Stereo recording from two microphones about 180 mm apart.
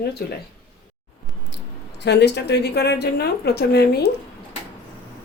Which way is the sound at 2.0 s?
70° left (ahead or behind).